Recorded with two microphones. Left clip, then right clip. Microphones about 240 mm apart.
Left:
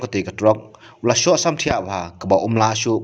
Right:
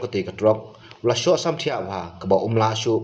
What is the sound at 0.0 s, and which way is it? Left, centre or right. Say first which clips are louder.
Speech: left 3 dB; left.